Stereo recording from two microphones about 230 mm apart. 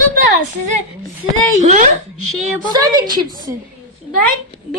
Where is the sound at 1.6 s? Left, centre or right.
Right.